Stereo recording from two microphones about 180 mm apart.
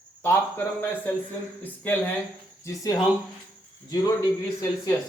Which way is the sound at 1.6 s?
10° left (ahead or behind).